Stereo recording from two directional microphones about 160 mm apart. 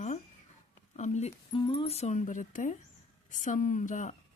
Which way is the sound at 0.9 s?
45° left (ahead or behind).